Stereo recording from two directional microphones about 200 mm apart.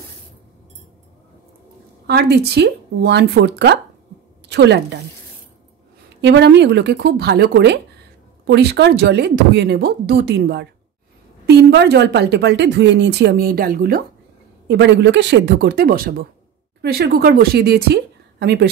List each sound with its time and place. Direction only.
2.0 s a woman's voice: 55° right (ahead or behind)
6.2 s a woman's voice: 60° right (ahead or behind)
14.7 s a woman's voice: 60° right (ahead or behind)